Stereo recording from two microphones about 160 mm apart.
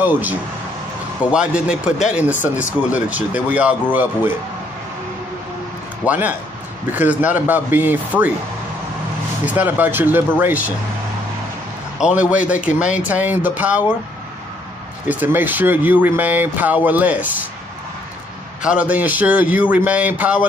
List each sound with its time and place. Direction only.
0.0 s speech: 10° right (ahead or behind)
6.0 s speech: 10° right (ahead or behind)
9.5 s speech: 10° right (ahead or behind)
12.0 s speech: 10° right (ahead or behind)
12.7 s speech: 50° left (ahead or behind)
13.1 s speech: 10° right (ahead or behind)
15.0 s speech: 10° right (ahead or behind)
18.6 s speech: 5° right (ahead or behind)